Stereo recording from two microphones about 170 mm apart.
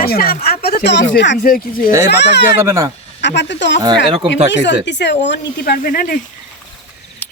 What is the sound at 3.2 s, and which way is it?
Speech, 90° left.